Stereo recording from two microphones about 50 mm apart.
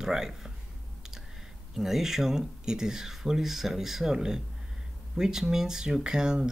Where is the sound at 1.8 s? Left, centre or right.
Centre.